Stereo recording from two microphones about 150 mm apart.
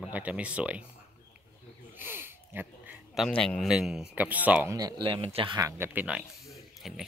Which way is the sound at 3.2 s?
5° left (ahead or behind).